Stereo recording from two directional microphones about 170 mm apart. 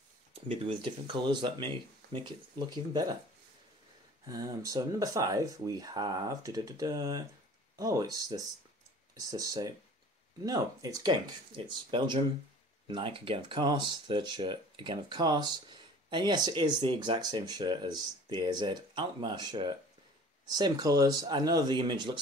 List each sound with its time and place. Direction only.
0.3 s speech: 35° right (ahead or behind)
4.3 s speech: 20° right (ahead or behind)